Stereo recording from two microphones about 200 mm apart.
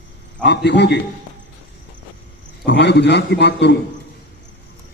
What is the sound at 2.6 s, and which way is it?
A man's voice, 60° left (ahead or behind).